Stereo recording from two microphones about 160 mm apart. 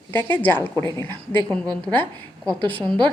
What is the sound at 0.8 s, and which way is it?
A woman's voice, 15° left (ahead or behind).